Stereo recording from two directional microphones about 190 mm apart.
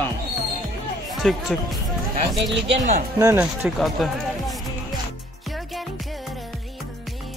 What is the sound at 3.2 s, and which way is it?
Speech, 15° right (ahead or behind).